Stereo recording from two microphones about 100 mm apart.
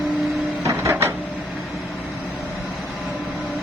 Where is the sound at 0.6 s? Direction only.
30° right (ahead or behind).